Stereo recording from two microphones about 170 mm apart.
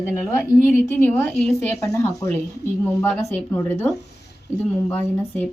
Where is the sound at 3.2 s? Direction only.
15° left (ahead or behind).